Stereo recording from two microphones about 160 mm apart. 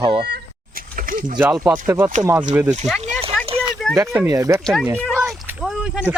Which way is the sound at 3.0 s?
40° right (ahead or behind).